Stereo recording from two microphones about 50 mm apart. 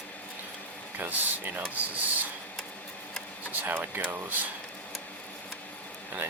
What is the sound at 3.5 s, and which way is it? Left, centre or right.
Speech, right.